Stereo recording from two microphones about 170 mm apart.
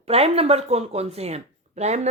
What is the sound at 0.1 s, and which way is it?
Speech, 35° right (ahead or behind).